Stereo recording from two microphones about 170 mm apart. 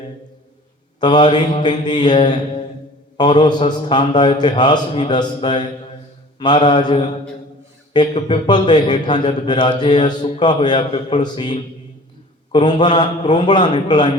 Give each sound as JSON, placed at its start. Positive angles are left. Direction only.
{"t": 0.9, "sound": "a man's voice", "side_deg": 25}